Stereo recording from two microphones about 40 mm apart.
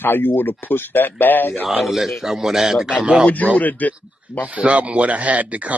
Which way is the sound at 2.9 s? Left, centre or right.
Right.